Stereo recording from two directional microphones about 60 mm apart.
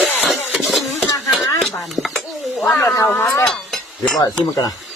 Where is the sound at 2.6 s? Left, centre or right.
Left.